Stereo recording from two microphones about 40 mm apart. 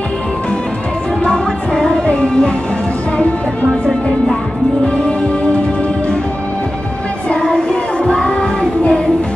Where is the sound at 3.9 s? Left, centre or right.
Centre.